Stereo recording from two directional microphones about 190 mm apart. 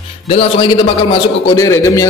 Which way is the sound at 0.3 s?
30° left (ahead or behind).